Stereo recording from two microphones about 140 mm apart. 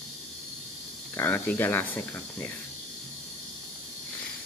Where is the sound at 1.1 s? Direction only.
15° left (ahead or behind).